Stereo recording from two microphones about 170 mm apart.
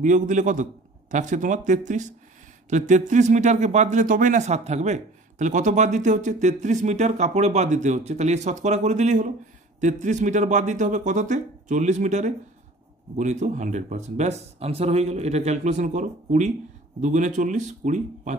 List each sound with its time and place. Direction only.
0.0 s speech: 50° right (ahead or behind)